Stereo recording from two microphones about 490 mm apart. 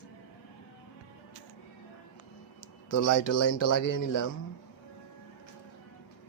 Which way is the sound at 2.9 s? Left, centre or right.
Left.